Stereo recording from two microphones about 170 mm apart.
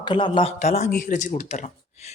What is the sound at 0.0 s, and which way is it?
Speech, 25° left (ahead or behind).